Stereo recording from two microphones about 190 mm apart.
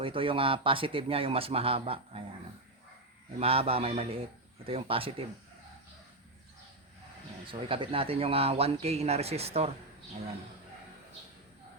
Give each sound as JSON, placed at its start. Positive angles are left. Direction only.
{"t": 0.0, "sound": "speech", "side_deg": -25}
{"t": 3.3, "sound": "speech", "side_deg": -30}
{"t": 7.4, "sound": "speech", "side_deg": -25}